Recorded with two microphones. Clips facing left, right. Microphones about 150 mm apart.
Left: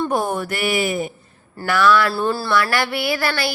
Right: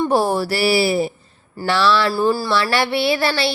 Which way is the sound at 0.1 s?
30° right (ahead or behind).